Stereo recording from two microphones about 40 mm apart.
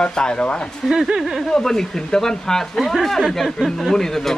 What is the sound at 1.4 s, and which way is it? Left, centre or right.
Speech, centre.